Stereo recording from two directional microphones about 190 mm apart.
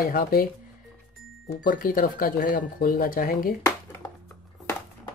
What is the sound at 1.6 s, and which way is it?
Speech, 50° left (ahead or behind).